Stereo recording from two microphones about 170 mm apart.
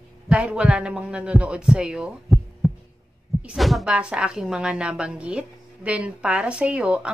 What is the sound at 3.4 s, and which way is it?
A woman's voice, centre (ahead or behind).